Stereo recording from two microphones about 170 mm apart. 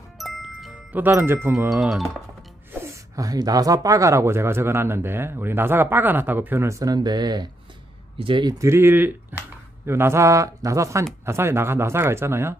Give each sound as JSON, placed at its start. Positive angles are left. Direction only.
{"t": 0.2, "sound": "music", "side_deg": 0}
{"t": 1.0, "sound": "speech", "side_deg": -10}
{"t": 1.7, "sound": "speech", "side_deg": 0}
{"t": 2.8, "sound": "speech", "side_deg": -20}